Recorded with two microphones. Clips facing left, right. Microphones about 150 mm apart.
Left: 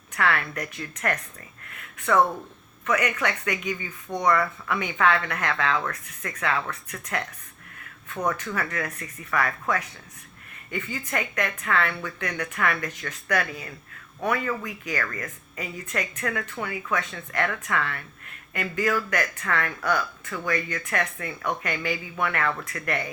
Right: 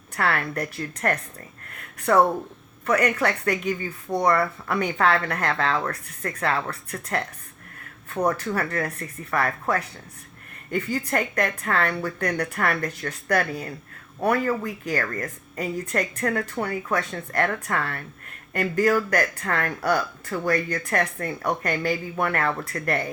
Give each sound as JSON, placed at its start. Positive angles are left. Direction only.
{"t": 0.1, "sound": "speech", "side_deg": -35}